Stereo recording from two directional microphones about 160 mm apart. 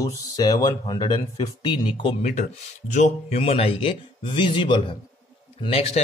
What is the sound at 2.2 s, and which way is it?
Speech, 45° left (ahead or behind).